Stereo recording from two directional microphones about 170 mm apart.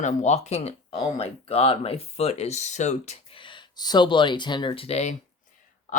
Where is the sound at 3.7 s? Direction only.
25° left (ahead or behind).